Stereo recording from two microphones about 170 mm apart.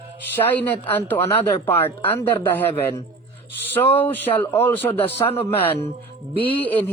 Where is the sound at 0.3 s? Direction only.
10° left (ahead or behind).